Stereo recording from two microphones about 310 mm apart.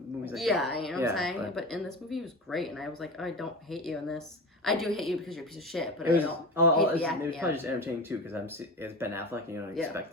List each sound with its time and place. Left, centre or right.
0.3 s a woman's voice: centre